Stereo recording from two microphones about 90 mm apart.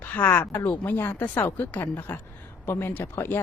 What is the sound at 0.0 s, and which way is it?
Speech, 20° left (ahead or behind).